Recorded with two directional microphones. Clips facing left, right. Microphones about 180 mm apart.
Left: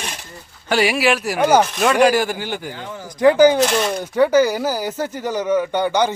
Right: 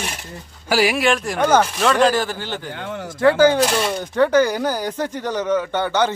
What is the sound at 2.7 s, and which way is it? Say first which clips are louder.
Speech: right 3 dB; 65° right (ahead or behind).